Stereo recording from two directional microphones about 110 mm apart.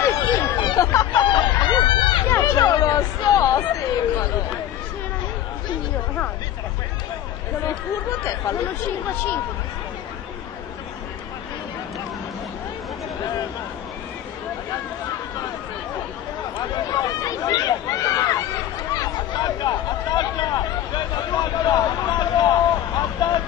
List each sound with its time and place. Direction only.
0.0 s chatter: 25° left (ahead or behind)
0.7 s speech: 30° left (ahead or behind)
1.1 s fowl: 45° left (ahead or behind)
2.2 s chatter: 25° left (ahead or behind)
7.6 s speech: 30° left (ahead or behind)
16.5 s run: 40° left (ahead or behind)
18.9 s a sound: 40° left (ahead or behind)